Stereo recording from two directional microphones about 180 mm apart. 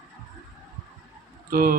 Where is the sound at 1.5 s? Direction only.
55° right (ahead or behind).